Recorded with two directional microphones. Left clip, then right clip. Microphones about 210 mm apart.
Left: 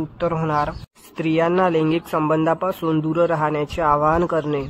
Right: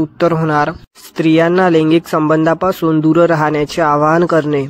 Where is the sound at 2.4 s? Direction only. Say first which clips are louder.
Right 7 dB; 30° right (ahead or behind).